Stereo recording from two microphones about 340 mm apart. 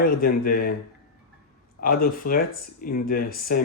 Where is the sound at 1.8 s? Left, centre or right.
Left.